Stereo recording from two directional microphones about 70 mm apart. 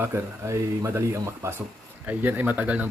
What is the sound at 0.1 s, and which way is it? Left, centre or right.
Speech, right.